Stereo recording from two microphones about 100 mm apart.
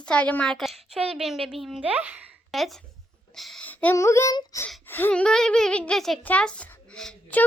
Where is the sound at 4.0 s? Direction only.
30° left (ahead or behind).